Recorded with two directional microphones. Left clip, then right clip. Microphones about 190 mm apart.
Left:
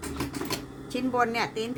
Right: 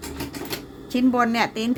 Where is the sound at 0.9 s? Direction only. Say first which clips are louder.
Right 5 dB; 35° right (ahead or behind).